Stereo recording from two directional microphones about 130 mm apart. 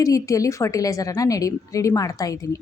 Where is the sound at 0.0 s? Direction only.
25° left (ahead or behind).